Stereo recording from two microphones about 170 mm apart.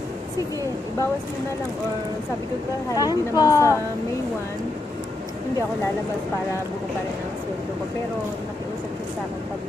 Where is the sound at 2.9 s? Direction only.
20° left (ahead or behind).